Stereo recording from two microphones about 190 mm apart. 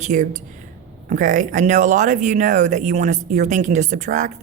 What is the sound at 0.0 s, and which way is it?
Speech, 40° right (ahead or behind).